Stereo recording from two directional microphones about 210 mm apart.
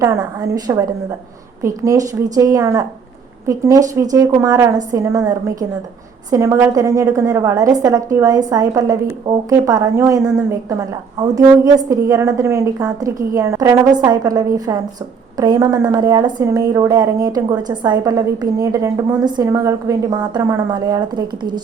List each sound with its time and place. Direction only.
0.0 s a woman's voice: 15° right (ahead or behind)